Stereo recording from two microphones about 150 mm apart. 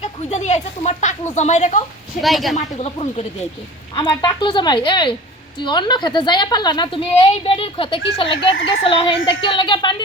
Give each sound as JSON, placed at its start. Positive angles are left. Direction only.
{"t": 0.0, "sound": "speech", "side_deg": 50}
{"t": 2.2, "sound": "a woman's voice", "side_deg": 0}
{"t": 2.6, "sound": "speech", "side_deg": 45}
{"t": 3.9, "sound": "a woman's voice", "side_deg": 30}